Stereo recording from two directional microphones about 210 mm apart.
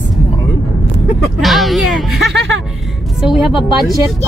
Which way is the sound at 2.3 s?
60° right (ahead or behind).